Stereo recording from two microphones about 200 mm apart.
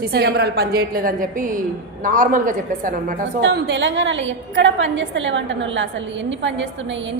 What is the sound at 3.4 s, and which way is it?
A woman's voice, 55° right (ahead or behind).